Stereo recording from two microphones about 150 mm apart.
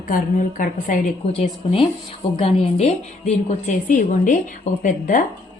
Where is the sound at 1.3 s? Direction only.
40° left (ahead or behind).